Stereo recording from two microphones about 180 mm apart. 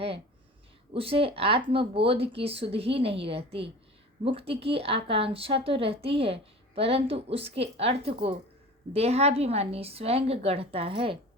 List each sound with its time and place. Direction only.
0.9 s a woman's voice: 30° right (ahead or behind)